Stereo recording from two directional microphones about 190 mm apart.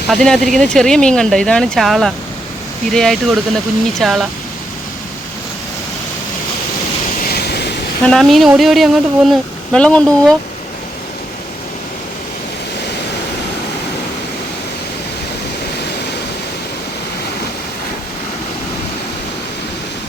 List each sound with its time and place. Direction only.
0.1 s speech: 5° left (ahead or behind)
7.3 s waves: 55° left (ahead or behind)
8.0 s speech: centre (ahead or behind)